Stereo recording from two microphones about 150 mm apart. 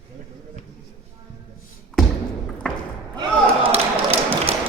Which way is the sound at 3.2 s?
40° right (ahead or behind).